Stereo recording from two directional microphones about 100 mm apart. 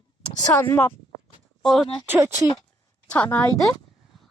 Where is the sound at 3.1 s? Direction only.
15° left (ahead or behind).